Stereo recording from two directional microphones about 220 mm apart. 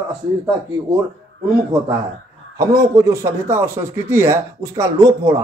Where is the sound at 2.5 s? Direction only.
15° right (ahead or behind).